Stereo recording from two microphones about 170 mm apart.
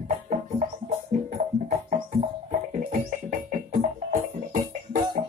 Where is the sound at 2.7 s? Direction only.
55° right (ahead or behind).